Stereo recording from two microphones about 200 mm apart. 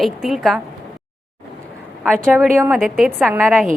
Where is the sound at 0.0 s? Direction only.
Centre (ahead or behind).